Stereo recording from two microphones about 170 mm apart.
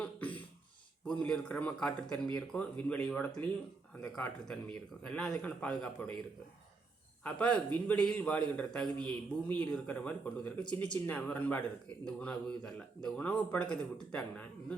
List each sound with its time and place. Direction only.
0.0 s beatboxing: 10° left (ahead or behind)
1.0 s a man's voice: 5° left (ahead or behind)
7.3 s a man's voice: 5° left (ahead or behind)